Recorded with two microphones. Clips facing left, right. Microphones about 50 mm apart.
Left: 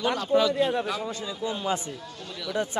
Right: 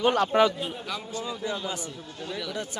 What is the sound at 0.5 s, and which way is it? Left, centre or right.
Speech, left.